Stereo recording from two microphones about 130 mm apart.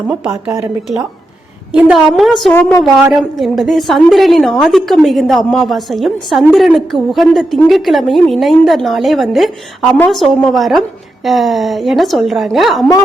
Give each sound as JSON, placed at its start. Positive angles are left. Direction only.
{"t": 0.1, "sound": "speech", "side_deg": -15}
{"t": 1.7, "sound": "a woman's voice", "side_deg": -5}
{"t": 2.5, "sound": "speech", "side_deg": 15}
{"t": 3.1, "sound": "a woman's voice", "side_deg": 0}